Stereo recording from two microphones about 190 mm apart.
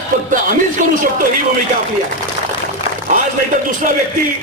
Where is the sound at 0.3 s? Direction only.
45° right (ahead or behind).